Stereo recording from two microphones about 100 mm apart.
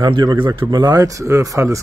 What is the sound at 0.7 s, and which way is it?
Speech, 40° right (ahead or behind).